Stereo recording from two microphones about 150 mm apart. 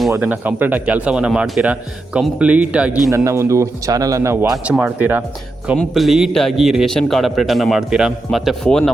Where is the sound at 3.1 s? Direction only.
20° right (ahead or behind).